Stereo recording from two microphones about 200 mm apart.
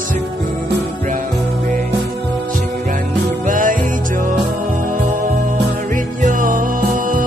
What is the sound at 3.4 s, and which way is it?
Music, 40° right (ahead or behind).